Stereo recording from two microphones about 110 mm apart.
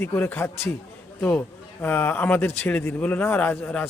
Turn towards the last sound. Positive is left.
turn(degrees=15)  # may be behind; listen again after turning